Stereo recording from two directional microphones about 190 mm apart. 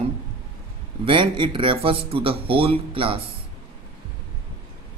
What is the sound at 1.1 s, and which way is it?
Speech, 25° right (ahead or behind).